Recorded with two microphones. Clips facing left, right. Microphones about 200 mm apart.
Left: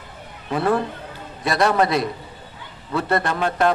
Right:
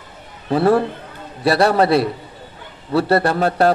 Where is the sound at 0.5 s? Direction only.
35° right (ahead or behind).